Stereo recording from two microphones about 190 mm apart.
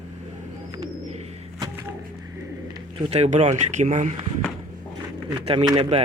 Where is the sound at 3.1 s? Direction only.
35° right (ahead or behind).